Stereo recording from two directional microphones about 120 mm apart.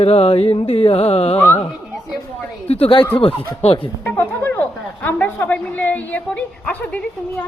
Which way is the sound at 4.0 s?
15° left (ahead or behind).